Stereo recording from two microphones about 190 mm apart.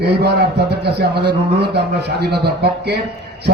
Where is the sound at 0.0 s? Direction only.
60° right (ahead or behind).